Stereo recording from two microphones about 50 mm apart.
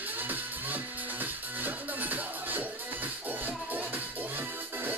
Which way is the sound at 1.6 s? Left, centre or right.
Right.